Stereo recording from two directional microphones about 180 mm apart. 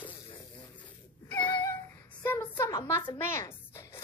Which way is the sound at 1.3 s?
25° left (ahead or behind).